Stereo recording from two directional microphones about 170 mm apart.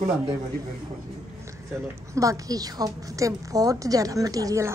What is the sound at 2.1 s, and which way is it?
A woman's voice, 20° right (ahead or behind).